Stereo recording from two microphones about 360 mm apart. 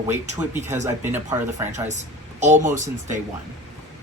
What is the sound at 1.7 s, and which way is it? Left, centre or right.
Speech, centre.